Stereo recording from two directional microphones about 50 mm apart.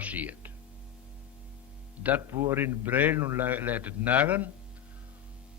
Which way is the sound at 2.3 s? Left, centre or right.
Right.